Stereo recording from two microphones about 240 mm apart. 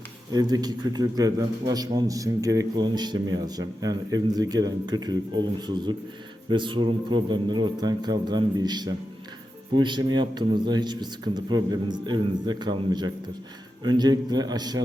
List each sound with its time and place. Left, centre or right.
0.3 s a man's voice: centre